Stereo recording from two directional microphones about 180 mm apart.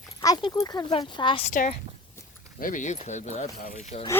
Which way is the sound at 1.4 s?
40° left (ahead or behind).